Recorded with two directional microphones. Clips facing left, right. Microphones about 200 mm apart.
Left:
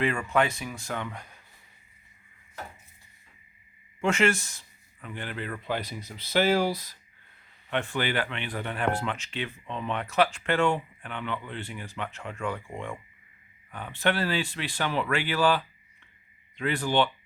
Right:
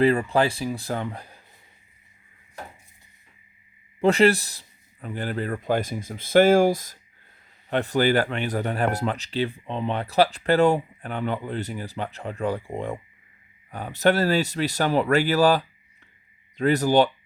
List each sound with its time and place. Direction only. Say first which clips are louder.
0.0 s speech: right 6 dB; 35° right (ahead or behind)
4.0 s speech: right 7 dB; 35° right (ahead or behind)